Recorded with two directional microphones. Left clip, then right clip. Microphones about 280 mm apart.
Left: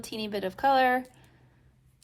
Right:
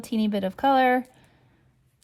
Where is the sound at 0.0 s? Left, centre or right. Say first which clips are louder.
Right 5 dB; right.